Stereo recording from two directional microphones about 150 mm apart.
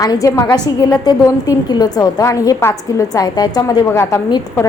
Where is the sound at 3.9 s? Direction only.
15° left (ahead or behind).